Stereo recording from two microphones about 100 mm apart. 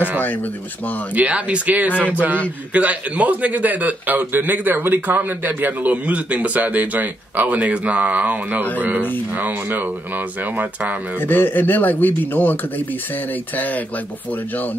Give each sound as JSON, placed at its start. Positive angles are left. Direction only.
{"t": 1.1, "sound": "a man's voice", "side_deg": -15}
{"t": 11.1, "sound": "speech", "side_deg": 20}